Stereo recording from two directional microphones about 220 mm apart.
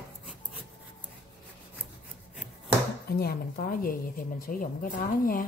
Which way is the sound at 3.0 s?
45° left (ahead or behind).